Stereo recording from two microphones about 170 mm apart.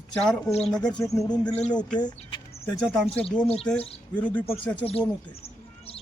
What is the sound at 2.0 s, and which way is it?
Speech, 25° left (ahead or behind).